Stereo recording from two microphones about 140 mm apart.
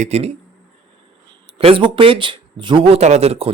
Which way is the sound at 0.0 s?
50° right (ahead or behind).